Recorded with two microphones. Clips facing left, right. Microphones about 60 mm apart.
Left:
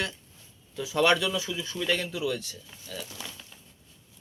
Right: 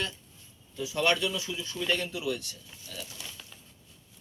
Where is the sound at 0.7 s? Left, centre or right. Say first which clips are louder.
Left 4 dB; left.